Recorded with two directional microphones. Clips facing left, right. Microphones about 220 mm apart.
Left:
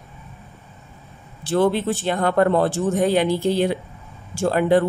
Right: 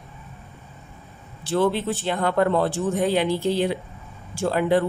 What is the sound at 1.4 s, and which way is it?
Speech, 45° left (ahead or behind).